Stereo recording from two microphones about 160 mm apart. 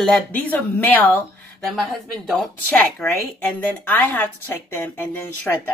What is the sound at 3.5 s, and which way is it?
Speech, 10° left (ahead or behind).